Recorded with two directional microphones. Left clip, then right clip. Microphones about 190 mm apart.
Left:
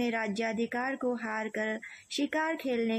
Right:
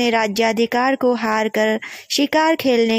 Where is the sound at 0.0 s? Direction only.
35° right (ahead or behind).